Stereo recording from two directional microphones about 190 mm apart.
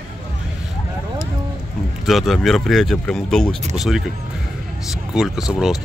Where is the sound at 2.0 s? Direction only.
Centre (ahead or behind).